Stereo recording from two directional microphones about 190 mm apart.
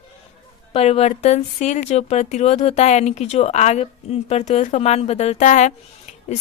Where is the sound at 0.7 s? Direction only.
30° left (ahead or behind).